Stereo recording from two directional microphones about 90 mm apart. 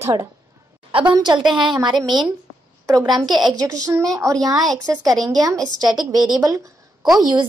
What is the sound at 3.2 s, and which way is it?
Speech, centre (ahead or behind).